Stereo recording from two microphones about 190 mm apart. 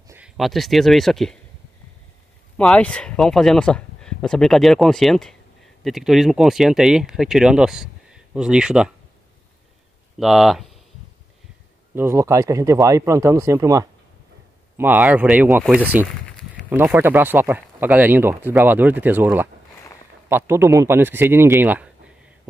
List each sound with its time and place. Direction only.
0.1 s speech: 5° right (ahead or behind)
2.5 s speech: 5° left (ahead or behind)
10.1 s speech: centre (ahead or behind)
11.9 s speech: 10° right (ahead or behind)